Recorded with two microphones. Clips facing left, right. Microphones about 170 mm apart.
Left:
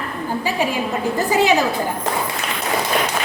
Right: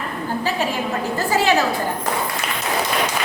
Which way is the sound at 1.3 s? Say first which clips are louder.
Left 1 dB; 15° left (ahead or behind).